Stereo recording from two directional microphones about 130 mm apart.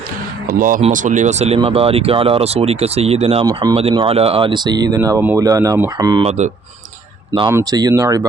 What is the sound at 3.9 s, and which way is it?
Speech, 45° right (ahead or behind).